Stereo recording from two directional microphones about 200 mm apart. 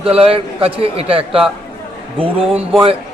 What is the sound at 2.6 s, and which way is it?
Speech, 30° right (ahead or behind).